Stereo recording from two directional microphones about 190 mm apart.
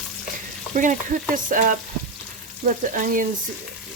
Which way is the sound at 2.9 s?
45° right (ahead or behind).